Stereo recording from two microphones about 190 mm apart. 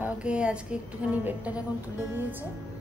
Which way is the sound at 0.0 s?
5° right (ahead or behind).